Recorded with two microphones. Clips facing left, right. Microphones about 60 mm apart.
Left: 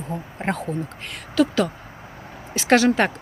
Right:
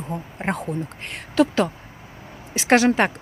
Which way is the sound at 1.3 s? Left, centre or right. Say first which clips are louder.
Right 1 dB; right.